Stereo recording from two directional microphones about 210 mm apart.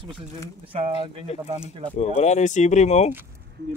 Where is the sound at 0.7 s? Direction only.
25° right (ahead or behind).